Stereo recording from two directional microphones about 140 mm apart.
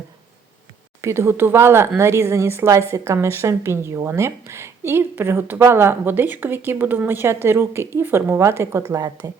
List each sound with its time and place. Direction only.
1.0 s a woman's voice: 20° right (ahead or behind)